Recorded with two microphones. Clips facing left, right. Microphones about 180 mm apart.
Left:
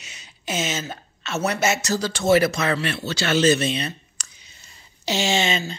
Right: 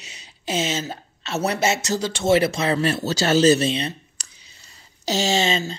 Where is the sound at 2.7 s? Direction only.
40° right (ahead or behind).